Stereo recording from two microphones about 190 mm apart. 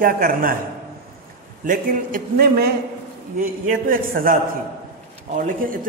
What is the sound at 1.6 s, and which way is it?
A man's voice, 45° right (ahead or behind).